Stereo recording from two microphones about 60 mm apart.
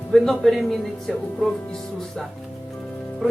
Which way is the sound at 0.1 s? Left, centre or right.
Centre.